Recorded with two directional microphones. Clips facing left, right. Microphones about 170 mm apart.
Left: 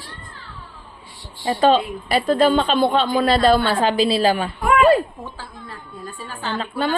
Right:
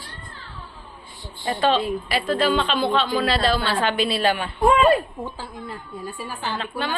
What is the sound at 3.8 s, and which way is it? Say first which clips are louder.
Speech: left 4 dB; 35° left (ahead or behind).